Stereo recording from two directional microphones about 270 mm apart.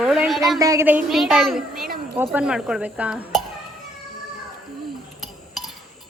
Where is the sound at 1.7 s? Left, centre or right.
Right.